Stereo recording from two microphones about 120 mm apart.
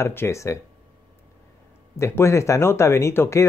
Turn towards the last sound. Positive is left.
turn(degrees=25)  # may be behind; listen again after turning